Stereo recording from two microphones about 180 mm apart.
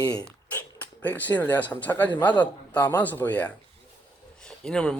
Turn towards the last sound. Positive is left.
turn(degrees=5)  # may be behind; listen again after turning